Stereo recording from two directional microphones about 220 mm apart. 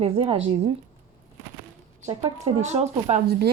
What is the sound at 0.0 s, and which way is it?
Speech, 25° right (ahead or behind).